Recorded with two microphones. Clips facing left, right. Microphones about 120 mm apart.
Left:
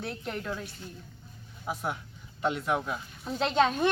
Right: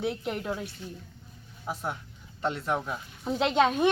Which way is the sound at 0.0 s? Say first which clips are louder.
Right 5 dB; 15° right (ahead or behind).